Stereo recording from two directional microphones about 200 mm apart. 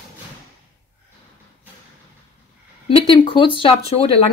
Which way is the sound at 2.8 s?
25° left (ahead or behind).